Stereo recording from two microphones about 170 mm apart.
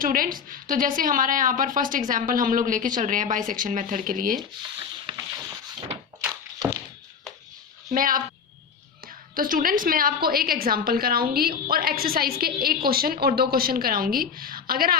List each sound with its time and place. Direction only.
0.0 s a woman's voice: 55° right (ahead or behind)
5.0 s a sound: 20° right (ahead or behind)
6.6 s thunk: 25° right (ahead or behind)
7.9 s a woman's voice: 55° right (ahead or behind)
9.3 s a woman's voice: 55° right (ahead or behind)